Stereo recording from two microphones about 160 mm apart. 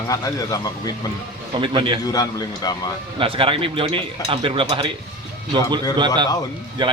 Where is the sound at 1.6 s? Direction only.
30° right (ahead or behind).